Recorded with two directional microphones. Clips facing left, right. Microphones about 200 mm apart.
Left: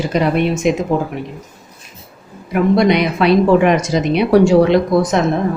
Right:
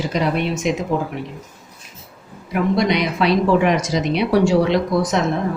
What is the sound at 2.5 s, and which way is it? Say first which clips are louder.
Speech: left 5 dB; 55° left (ahead or behind).